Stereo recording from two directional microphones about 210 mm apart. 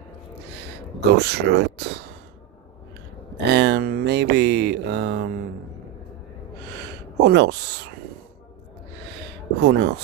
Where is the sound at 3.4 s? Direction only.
55° right (ahead or behind).